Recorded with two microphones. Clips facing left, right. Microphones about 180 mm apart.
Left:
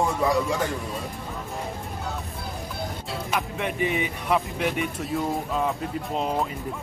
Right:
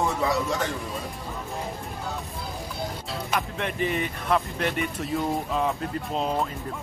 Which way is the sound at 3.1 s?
Centre (ahead or behind).